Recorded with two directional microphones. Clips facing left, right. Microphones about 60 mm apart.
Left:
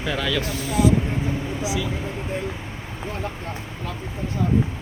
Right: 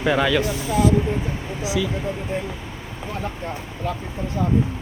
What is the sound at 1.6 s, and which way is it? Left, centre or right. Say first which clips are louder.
Speech: right 5 dB; right.